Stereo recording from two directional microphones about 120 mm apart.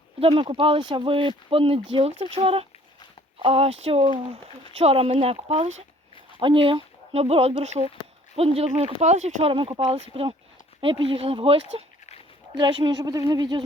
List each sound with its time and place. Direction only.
0.2 s speech: 50° right (ahead or behind); by 4.2 s 70° right (ahead or behind)
4.7 s speech: 60° right (ahead or behind)
6.4 s speech: 45° right (ahead or behind); by 9.5 s 65° right (ahead or behind)
9.5 s speech: 50° right (ahead or behind)
11.6 s a sound: 60° left (ahead or behind)
12.5 s speech: 40° right (ahead or behind)